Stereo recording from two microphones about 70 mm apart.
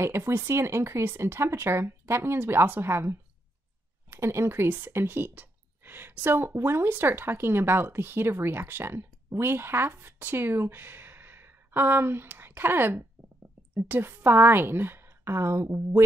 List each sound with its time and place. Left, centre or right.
0.0 s speech: right